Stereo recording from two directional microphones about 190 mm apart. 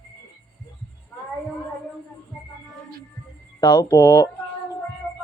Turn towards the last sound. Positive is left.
turn(degrees=15)  # may be behind; listen again after turning